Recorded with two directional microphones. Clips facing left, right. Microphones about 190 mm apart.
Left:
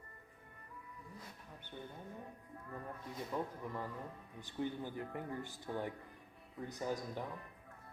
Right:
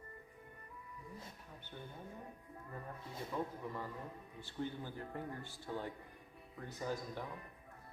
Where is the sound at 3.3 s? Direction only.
15° left (ahead or behind).